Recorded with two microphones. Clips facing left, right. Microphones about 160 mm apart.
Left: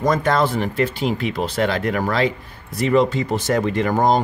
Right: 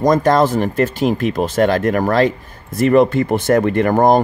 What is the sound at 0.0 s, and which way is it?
Speech, 40° right (ahead or behind).